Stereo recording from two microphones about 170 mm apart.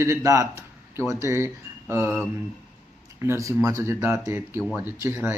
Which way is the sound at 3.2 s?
15° right (ahead or behind).